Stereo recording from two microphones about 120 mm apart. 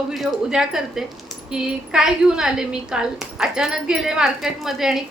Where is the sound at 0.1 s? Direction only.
Centre (ahead or behind).